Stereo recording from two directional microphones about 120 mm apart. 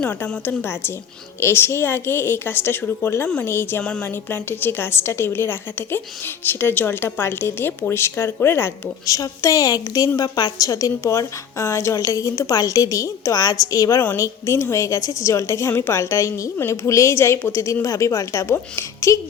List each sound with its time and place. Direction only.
0.0 s a woman's voice: 10° left (ahead or behind); by 14.0 s 30° left (ahead or behind)
14.0 s a woman's voice: 20° left (ahead or behind)